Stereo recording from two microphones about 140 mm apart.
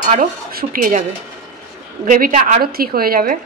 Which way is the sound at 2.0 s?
80° right.